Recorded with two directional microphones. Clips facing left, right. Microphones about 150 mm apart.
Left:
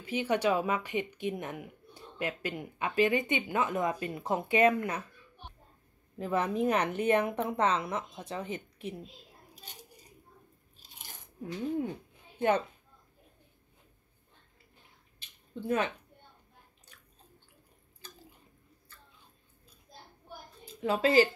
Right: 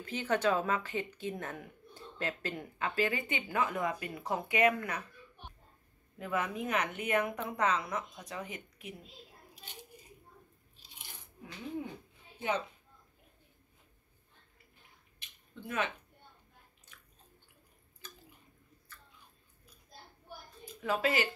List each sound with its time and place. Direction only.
0.0 s speech: 10° left (ahead or behind)
6.1 s a woman's voice: 30° left (ahead or behind)
12.4 s a woman's voice: 55° left (ahead or behind)
15.1 s a sound: 30° left (ahead or behind)
18.0 s drip: 30° left (ahead or behind)
20.6 s a woman's voice: 30° left (ahead or behind)